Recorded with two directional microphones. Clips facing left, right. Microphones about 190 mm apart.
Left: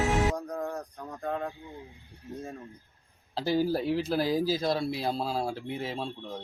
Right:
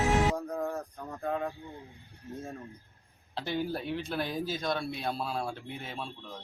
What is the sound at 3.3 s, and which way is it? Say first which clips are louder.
Speech: left 6 dB; 35° left (ahead or behind).